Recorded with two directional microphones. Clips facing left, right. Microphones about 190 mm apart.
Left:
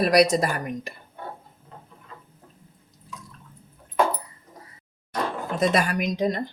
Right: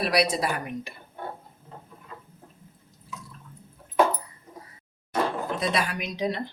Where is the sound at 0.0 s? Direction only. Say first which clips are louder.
Left 6 dB; 45° left (ahead or behind).